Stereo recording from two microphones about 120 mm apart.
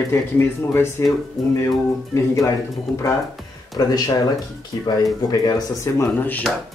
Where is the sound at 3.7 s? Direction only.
30° left (ahead or behind).